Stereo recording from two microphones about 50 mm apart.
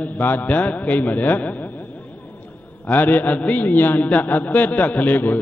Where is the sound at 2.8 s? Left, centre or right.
Left.